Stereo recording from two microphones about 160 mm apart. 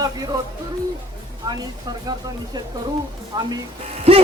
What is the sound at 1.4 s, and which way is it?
Speech, 25° right (ahead or behind).